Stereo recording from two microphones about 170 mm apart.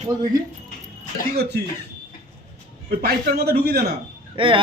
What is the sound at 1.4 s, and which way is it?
Speech, 75° right (ahead or behind).